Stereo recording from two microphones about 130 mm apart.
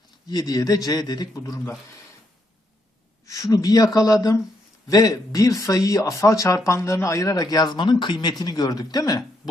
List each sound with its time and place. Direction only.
0.3 s speech: 30° left (ahead or behind)
3.2 s speech: 25° left (ahead or behind)